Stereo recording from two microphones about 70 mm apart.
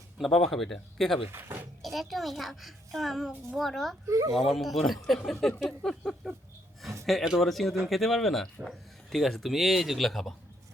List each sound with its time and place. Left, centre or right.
0.2 s speech: centre
1.3 s speech: right
1.8 s speech: centre
4.0 s speech: right
4.4 s speech: centre
5.6 s a sound: centre
6.2 s speech: centre